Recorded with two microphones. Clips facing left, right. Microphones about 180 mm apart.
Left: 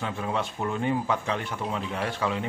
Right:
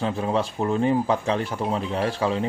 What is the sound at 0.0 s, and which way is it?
Speech, 30° right (ahead or behind).